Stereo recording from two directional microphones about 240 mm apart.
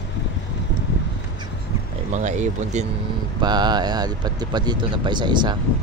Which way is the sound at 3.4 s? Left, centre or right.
Centre.